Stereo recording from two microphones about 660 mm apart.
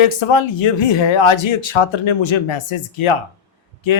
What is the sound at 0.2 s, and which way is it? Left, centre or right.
Speech, left.